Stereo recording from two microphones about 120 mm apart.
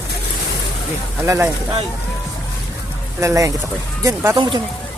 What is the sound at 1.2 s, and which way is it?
Speech, 25° right (ahead or behind).